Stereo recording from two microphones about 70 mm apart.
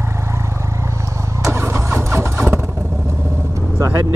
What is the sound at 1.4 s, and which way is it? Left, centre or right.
Vehicle, right.